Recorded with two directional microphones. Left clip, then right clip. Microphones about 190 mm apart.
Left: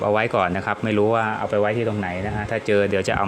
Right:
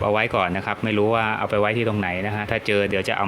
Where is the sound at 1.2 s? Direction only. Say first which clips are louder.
Even; 20° right (ahead or behind).